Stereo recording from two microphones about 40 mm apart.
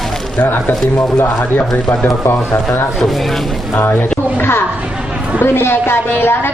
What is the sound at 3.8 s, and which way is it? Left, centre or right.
Speech, left.